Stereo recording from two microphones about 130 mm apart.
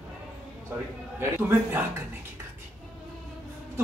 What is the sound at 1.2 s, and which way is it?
Speech, 15° right (ahead or behind).